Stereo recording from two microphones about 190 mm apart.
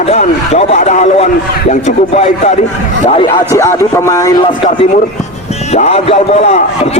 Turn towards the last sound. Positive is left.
turn(degrees=35)  # may be behind; listen again after turning